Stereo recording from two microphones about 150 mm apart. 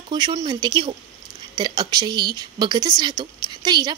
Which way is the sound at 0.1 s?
30° right (ahead or behind).